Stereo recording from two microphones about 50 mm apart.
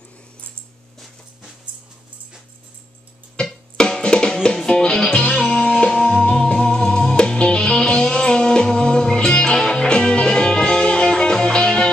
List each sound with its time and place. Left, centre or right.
3.3 s music: centre